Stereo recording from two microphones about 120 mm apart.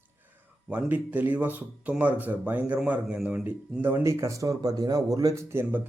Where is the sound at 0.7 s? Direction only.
10° right (ahead or behind).